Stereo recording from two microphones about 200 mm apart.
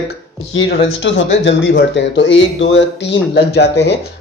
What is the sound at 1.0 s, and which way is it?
Speech, 60° left (ahead or behind).